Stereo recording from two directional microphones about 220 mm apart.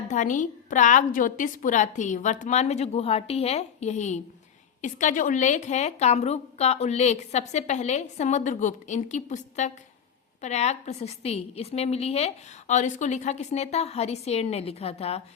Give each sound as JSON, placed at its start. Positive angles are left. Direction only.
{"t": 0.1, "sound": "a woman's voice", "side_deg": 35}